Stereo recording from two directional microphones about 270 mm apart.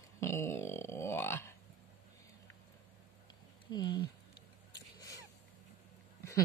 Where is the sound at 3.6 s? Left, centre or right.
Centre.